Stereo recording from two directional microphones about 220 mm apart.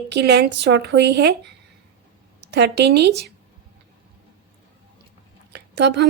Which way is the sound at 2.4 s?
50° right (ahead or behind).